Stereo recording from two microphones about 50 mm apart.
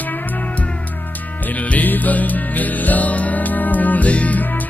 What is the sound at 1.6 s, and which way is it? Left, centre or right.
Music, left.